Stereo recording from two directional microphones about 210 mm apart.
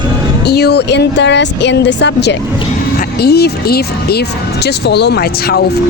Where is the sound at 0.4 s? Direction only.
50° left (ahead or behind).